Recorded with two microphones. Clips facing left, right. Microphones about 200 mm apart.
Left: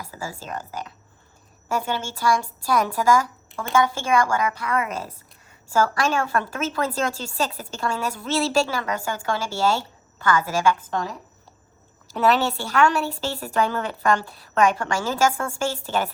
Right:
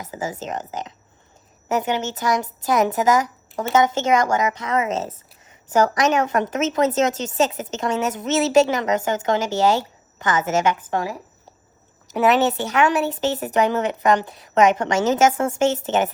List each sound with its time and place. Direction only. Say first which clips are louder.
0.0 s a woman's voice: right 6 dB; 20° right (ahead or behind)
10.9 s speech: right 3 dB; 10° right (ahead or behind)
12.1 s a woman's voice: right 3 dB; 20° right (ahead or behind)